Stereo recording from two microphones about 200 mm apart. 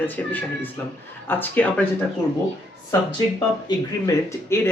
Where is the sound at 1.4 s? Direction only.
10° left (ahead or behind).